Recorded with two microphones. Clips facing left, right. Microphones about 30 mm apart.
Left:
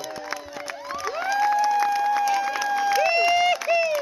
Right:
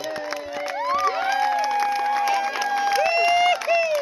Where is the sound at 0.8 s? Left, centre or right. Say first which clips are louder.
Right 7 dB; right.